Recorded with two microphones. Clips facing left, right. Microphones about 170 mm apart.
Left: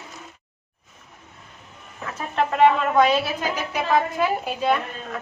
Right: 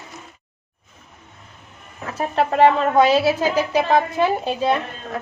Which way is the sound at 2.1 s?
35° right (ahead or behind).